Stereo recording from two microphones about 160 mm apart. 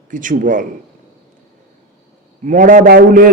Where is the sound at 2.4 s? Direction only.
55° right (ahead or behind).